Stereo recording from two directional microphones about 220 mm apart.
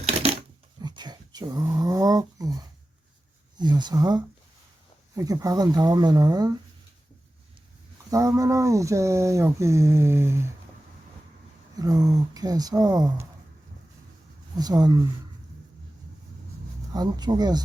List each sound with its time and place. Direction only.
0.0 s a sound: 25° right (ahead or behind)
3.6 s speech: 20° right (ahead or behind)
8.1 s speech: 15° right (ahead or behind)
11.8 s speech: 15° right (ahead or behind)
14.6 s speech: 15° right (ahead or behind)
16.9 s speech: 20° right (ahead or behind)